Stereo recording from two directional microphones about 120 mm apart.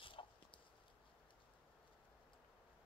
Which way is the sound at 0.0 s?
45° left (ahead or behind).